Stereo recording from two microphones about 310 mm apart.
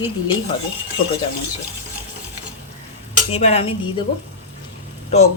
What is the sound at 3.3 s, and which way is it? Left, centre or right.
Dishes, centre.